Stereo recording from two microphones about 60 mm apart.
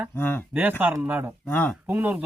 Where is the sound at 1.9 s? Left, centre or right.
Right.